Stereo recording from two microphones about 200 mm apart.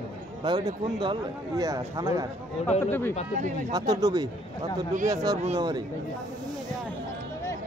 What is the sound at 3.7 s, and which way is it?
Speech, 20° right (ahead or behind).